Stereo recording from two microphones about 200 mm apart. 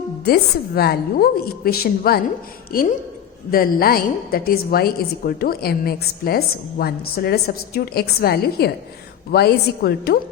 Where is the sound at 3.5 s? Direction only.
45° left (ahead or behind).